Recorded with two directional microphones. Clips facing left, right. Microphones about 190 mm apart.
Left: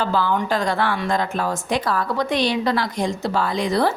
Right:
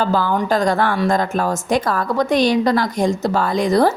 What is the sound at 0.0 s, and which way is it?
A woman's voice, 45° right (ahead or behind).